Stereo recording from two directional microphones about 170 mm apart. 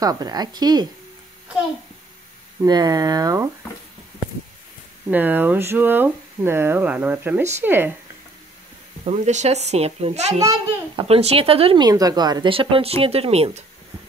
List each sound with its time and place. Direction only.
0.0 s speech: 20° right (ahead or behind)
2.6 s speech: 20° right (ahead or behind)
5.0 s speech: 10° right (ahead or behind)
9.0 s speech: 40° right (ahead or behind)
10.4 s speech: 20° right (ahead or behind)
11.1 s speech: 35° right (ahead or behind)